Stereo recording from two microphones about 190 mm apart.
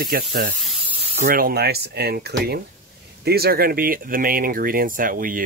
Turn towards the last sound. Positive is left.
turn(degrees=-45)  # may be behind; listen again after turning